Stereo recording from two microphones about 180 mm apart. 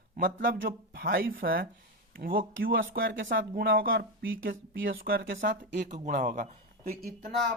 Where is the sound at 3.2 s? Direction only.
50° right (ahead or behind); by 4.8 s 75° right (ahead or behind).